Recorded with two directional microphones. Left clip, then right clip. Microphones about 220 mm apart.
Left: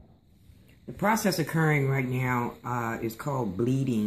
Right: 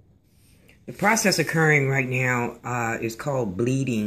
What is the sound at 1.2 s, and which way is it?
Speech, 20° right (ahead or behind).